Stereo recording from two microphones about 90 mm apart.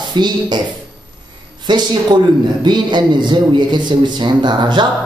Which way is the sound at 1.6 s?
55° right (ahead or behind).